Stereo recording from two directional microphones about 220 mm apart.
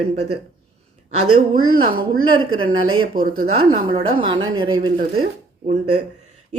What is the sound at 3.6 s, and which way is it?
Speech, 25° right (ahead or behind).